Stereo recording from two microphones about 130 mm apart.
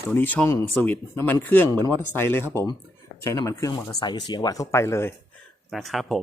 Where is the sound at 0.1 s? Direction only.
15° left (ahead or behind).